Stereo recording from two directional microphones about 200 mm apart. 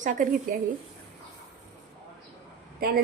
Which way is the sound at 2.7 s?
50° right (ahead or behind).